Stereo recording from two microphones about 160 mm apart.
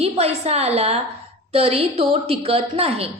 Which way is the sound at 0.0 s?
40° right (ahead or behind).